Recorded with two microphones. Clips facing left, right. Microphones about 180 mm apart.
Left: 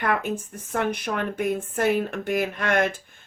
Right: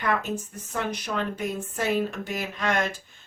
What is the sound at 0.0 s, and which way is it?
A woman's voice, 55° left (ahead or behind).